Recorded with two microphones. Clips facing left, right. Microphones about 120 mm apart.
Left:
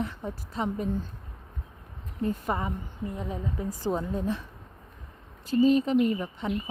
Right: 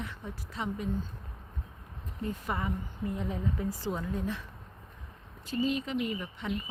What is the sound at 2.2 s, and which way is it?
Speech, 30° left (ahead or behind).